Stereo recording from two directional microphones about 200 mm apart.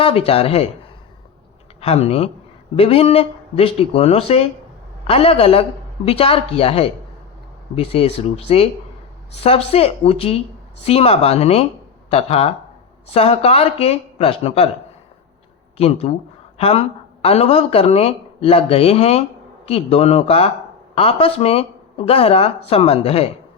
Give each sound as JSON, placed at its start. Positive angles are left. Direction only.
{"t": 0.0, "sound": "speech", "side_deg": 30}
{"t": 1.8, "sound": "speech", "side_deg": 30}
{"t": 15.8, "sound": "speech", "side_deg": 30}